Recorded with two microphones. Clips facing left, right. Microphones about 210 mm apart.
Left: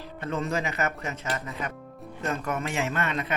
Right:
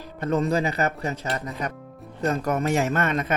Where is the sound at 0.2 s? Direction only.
40° right (ahead or behind).